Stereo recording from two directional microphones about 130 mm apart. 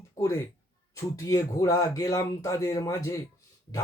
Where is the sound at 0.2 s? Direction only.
20° left (ahead or behind).